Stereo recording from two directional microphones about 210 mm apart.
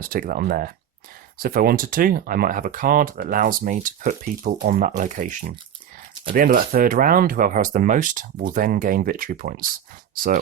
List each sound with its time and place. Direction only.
0.0 s speech: 40° right (ahead or behind)